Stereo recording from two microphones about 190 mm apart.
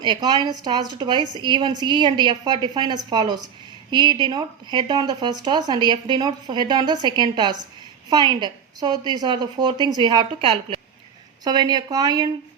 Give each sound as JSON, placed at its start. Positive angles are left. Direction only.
{"t": 0.0, "sound": "speech", "side_deg": -20}
{"t": 11.4, "sound": "speech", "side_deg": -20}